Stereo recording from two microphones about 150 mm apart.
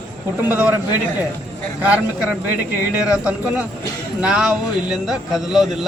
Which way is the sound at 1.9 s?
10° right (ahead or behind).